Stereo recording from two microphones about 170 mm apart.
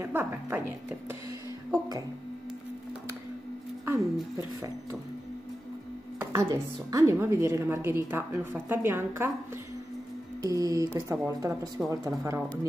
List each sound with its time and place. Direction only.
0.0 s a woman's voice: 15° right (ahead or behind)
3.8 s a sound: 15° right (ahead or behind)
6.3 s a woman's voice: 15° right (ahead or behind)
10.5 s a woman's voice: 20° right (ahead or behind)
11.8 s a woman's voice: 5° right (ahead or behind)
12.2 s a woman's voice: 15° right (ahead or behind)